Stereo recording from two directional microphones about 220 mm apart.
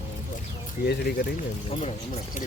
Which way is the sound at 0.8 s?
50° left (ahead or behind).